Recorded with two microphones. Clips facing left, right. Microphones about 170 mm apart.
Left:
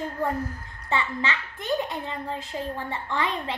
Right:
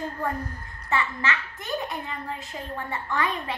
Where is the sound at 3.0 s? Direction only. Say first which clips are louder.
Even; 25° left (ahead or behind).